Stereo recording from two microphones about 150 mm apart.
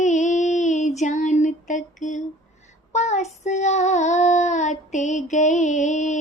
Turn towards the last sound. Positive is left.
turn(degrees=55)  # may be behind; listen again after turning